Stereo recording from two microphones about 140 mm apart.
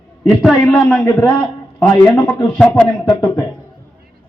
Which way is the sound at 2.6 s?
10° left (ahead or behind).